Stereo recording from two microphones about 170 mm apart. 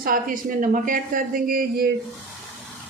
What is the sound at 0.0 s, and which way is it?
Speech, 55° right (ahead or behind).